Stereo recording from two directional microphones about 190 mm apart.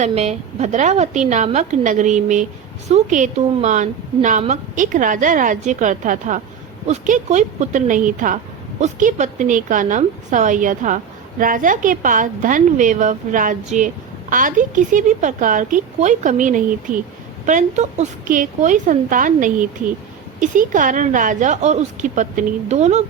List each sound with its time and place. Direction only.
0.0 s a woman's voice: 35° right (ahead or behind)